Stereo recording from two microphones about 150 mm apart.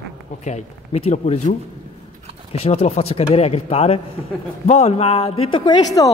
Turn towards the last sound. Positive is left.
turn(degrees=30)  # may be behind; listen again after turning